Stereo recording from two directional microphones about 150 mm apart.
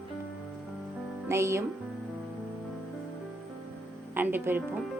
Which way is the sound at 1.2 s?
20° right (ahead or behind).